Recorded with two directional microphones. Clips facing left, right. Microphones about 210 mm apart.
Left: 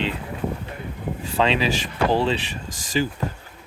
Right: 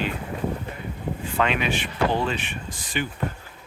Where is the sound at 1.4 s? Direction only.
30° left (ahead or behind).